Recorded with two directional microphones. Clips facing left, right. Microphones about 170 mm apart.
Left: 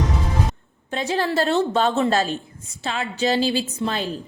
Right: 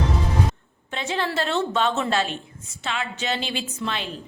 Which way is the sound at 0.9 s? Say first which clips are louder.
Left 4 dB; 40° left (ahead or behind).